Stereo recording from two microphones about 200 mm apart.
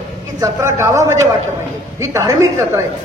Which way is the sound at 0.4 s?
15° right (ahead or behind).